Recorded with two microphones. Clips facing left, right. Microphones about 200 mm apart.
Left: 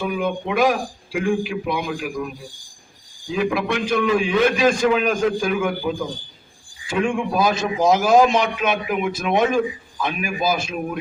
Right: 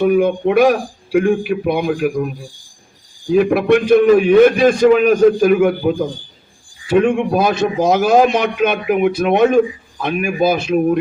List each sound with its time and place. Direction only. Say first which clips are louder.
0.0 s a man's voice: right 10 dB; 60° right (ahead or behind)
10.8 s a man's voice: right 12 dB; 45° right (ahead or behind)